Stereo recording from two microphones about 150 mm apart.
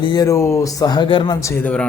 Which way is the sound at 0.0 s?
25° left (ahead or behind).